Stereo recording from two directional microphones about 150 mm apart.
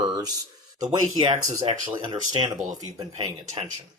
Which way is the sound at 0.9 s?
25° right (ahead or behind).